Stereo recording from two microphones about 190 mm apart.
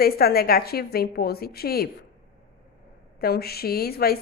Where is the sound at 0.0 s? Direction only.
55° left (ahead or behind).